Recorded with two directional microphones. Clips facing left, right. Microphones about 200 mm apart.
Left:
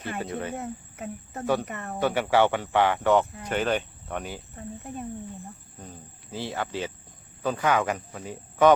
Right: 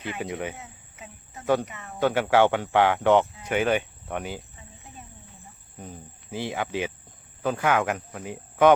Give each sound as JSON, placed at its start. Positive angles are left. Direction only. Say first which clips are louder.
{"t": 0.2, "sound": "speech", "louder": "right 1 dB", "side_deg": -15}
{"t": 0.5, "sound": "speech", "louder": "left 11 dB", "side_deg": 55}
{"t": 2.1, "sound": "speech", "louder": "right 2 dB", "side_deg": -10}
{"t": 4.5, "sound": "cricket", "louder": "left 11 dB", "side_deg": 55}
{"t": 5.8, "sound": "cricket", "louder": "right 4 dB", "side_deg": -15}
{"t": 7.4, "sound": "speech", "louder": "right 1 dB", "side_deg": -10}